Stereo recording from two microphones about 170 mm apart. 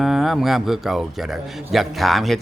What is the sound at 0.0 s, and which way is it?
Speech, centre (ahead or behind).